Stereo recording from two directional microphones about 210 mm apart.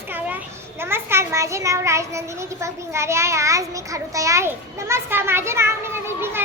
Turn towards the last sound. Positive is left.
turn(degrees=-10)  # may be behind; listen again after turning